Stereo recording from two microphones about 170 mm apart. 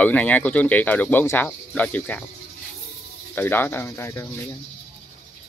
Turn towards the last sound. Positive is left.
turn(degrees=15)  # may be behind; listen again after turning